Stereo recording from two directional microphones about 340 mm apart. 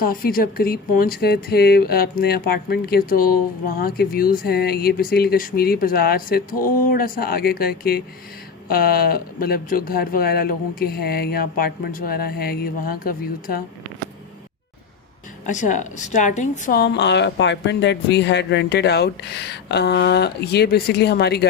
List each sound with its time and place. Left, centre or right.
0.0 s a woman's voice: left
15.4 s a woman's voice: left